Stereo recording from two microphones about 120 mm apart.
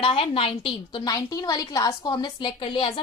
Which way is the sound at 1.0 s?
30° left (ahead or behind).